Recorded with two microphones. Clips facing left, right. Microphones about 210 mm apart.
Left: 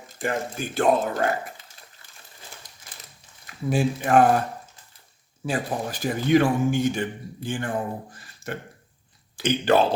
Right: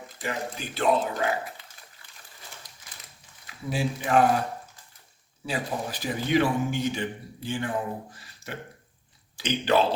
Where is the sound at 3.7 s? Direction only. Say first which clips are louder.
Left 4 dB; 50° left (ahead or behind).